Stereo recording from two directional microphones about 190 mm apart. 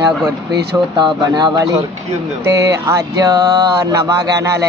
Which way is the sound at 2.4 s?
15° right (ahead or behind).